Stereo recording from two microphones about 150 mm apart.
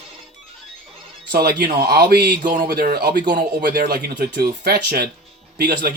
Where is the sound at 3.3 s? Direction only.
75° right (ahead or behind).